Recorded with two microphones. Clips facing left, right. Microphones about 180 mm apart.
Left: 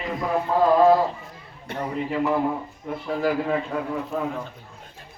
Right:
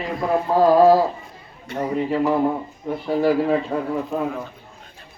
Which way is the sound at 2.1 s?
35° right (ahead or behind).